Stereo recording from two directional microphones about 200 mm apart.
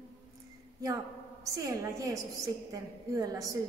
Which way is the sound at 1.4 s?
15° right (ahead or behind).